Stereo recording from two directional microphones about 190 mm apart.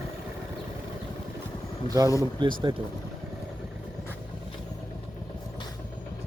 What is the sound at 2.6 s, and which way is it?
Speech, 25° right (ahead or behind).